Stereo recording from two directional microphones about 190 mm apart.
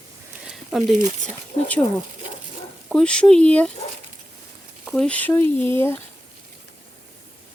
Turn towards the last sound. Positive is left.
turn(degrees=10)  # may be behind; listen again after turning